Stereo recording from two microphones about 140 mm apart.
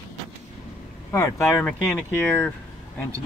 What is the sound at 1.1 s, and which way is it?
Speech, 20° left (ahead or behind).